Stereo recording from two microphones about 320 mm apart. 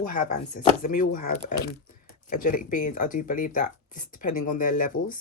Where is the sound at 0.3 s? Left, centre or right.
Left.